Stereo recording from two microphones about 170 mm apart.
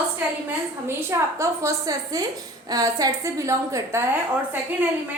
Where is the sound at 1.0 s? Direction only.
15° right (ahead or behind).